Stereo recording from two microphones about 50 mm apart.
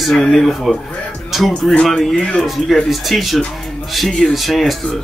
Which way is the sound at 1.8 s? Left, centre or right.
Centre.